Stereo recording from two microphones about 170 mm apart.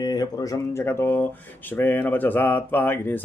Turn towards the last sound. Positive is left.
turn(degrees=10)  # may be behind; listen again after turning